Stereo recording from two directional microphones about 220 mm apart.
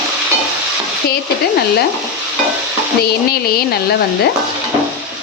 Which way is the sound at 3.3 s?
45° left (ahead or behind).